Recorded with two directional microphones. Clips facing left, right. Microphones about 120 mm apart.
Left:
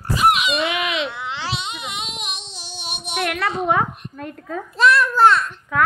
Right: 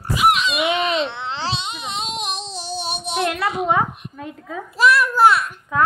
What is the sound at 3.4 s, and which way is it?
A child's voice, 10° right (ahead or behind).